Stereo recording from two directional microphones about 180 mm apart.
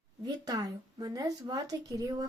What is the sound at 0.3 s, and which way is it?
Speech, 20° right (ahead or behind).